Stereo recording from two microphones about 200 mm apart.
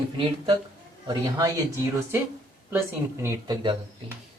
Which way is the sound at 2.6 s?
15° right (ahead or behind).